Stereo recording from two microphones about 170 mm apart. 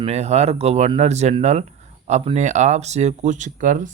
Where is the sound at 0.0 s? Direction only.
40° right (ahead or behind).